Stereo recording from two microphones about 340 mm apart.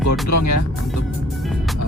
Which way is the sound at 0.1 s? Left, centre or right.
Left.